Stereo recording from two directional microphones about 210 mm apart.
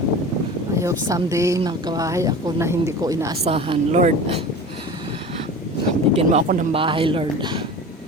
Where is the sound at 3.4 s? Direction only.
30° right (ahead or behind).